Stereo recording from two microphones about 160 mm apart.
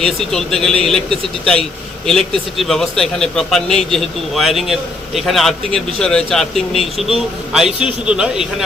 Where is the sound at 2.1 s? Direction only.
5° left (ahead or behind).